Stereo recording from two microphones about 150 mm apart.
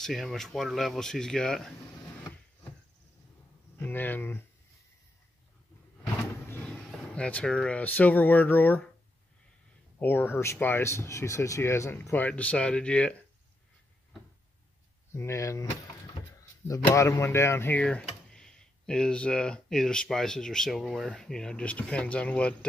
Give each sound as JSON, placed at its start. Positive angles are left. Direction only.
{"t": 0.0, "sound": "speech", "side_deg": 0}
{"t": 3.7, "sound": "speech", "side_deg": 15}
{"t": 7.2, "sound": "speech", "side_deg": 5}
{"t": 9.9, "sound": "speech", "side_deg": 15}
{"t": 15.1, "sound": "speech", "side_deg": 20}
{"t": 16.6, "sound": "speech", "side_deg": 20}